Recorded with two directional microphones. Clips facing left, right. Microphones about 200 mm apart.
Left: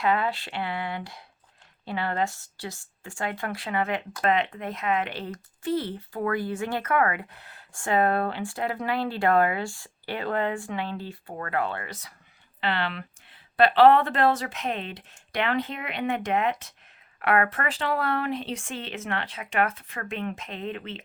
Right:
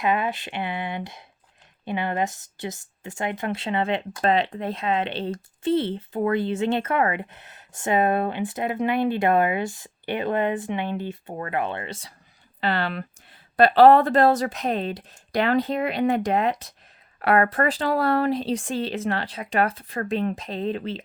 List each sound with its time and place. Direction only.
0.0 s speech: 20° right (ahead or behind)
12.5 s speech: 40° right (ahead or behind)